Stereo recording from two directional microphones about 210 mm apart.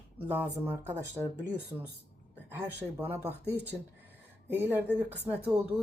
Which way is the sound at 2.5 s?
10° right (ahead or behind).